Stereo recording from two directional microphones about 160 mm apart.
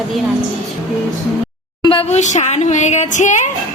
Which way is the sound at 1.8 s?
35° left (ahead or behind).